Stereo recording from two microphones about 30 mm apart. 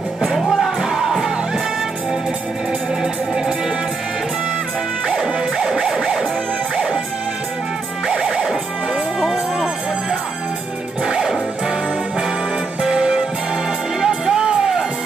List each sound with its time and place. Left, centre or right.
0.2 s music: centre
5.0 s music: centre
12.8 s music: centre